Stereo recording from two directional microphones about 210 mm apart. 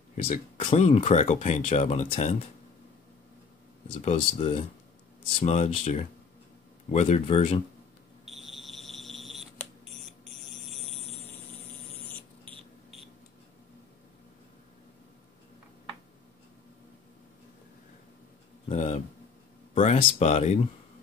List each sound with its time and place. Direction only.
0.2 s speech: 30° left (ahead or behind)
3.9 s speech: 30° left (ahead or behind)
8.3 s fire alarm: centre (ahead or behind)
10.7 s a sound: 30° right (ahead or behind)
18.7 s a sound: 30° left (ahead or behind)
19.7 s speech: 30° left (ahead or behind)